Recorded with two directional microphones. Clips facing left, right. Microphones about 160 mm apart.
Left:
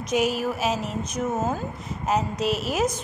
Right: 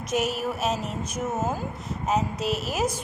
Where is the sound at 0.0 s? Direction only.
Centre (ahead or behind).